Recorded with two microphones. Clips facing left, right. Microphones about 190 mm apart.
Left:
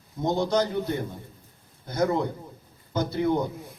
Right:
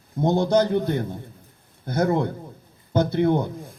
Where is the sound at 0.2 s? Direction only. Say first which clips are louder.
Right 5 dB; 55° right (ahead or behind).